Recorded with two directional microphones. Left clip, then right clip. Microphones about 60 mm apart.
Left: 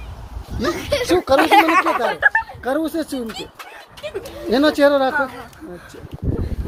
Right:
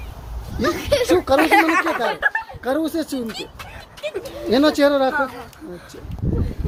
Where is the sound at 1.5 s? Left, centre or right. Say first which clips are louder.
Left 4 dB; left.